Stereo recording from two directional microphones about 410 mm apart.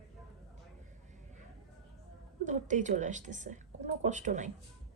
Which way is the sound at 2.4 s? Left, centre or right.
Centre.